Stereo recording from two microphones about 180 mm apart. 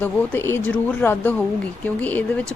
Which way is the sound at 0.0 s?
10° left (ahead or behind).